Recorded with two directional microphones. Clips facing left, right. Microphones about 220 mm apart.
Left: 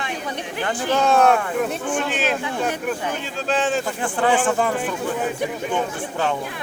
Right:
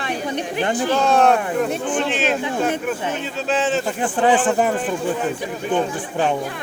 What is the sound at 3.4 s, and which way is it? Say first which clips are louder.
Speech: right 1 dB; centre (ahead or behind).